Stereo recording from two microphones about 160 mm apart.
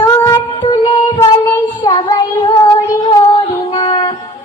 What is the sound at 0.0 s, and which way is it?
Child singing, 25° left (ahead or behind).